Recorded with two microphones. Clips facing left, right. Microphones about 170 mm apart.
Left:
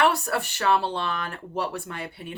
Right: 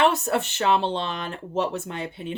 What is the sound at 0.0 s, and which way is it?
Speech, 20° right (ahead or behind).